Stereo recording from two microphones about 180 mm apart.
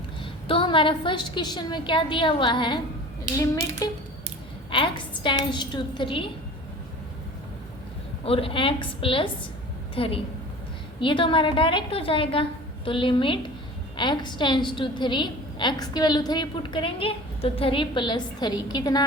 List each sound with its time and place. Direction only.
0.2 s a woman's voice: 30° left (ahead or behind)
8.2 s a woman's voice: 30° left (ahead or behind)